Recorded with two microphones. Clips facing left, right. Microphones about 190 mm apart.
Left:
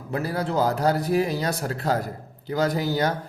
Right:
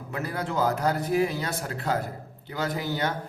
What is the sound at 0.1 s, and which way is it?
A man's voice, 35° left (ahead or behind).